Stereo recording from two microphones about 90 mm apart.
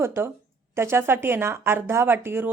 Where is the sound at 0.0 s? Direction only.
25° right (ahead or behind).